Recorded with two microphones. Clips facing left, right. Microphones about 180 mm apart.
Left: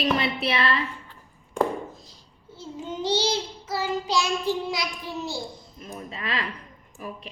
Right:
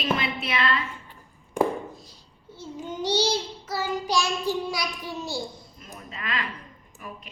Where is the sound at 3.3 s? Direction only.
20° left (ahead or behind).